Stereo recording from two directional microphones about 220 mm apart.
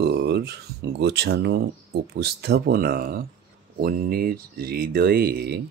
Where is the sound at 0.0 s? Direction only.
50° right (ahead or behind).